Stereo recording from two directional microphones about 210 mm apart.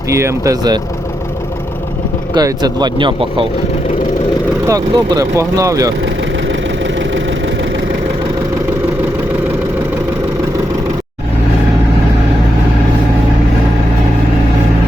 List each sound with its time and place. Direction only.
0.1 s speech: 15° right (ahead or behind)
2.3 s speech: 20° right (ahead or behind)
4.6 s speech: 15° right (ahead or behind)